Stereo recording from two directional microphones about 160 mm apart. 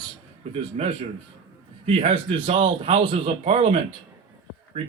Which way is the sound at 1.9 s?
35° right (ahead or behind).